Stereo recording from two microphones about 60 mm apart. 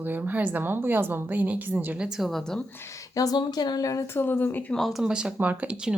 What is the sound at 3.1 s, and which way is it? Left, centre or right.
Speech, left.